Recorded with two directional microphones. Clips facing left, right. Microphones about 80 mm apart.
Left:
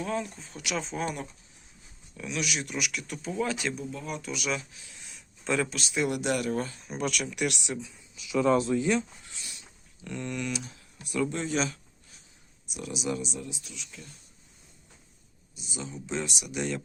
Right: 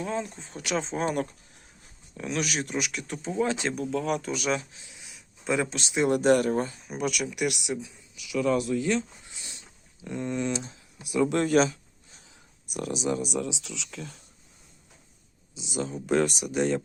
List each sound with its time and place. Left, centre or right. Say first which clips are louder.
0.0 s speech: right 1 dB; right
2.1 s speech: right 3 dB; right
3.8 s speech: right 8 dB; right
4.2 s speech: right 4 dB; right
4.9 s a sound: even; centre
5.7 s speech: right 4 dB; right
6.8 s speech: right 2 dB; centre
8.1 s speech: left 1 dB; left
9.2 s a sound: even; right
11.3 s speech: right 8 dB; right
12.2 s a sound: right 4 dB; right
12.9 s speech: right 3 dB; right
13.2 s speech: right 8 dB; right
15.8 s speech: right 9 dB; right